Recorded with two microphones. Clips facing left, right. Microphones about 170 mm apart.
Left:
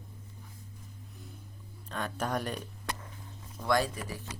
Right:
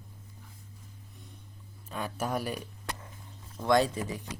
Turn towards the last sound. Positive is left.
turn(degrees=-25)  # may be behind; listen again after turning